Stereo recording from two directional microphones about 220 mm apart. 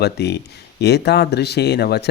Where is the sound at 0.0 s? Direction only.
50° left (ahead or behind).